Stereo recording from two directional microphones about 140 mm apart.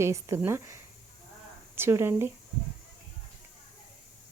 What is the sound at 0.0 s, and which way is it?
Speech, 20° right (ahead or behind).